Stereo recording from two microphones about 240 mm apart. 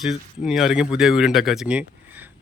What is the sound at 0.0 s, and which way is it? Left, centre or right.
Speech, centre.